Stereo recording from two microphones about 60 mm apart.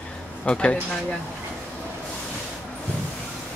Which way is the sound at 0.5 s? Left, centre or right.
Centre.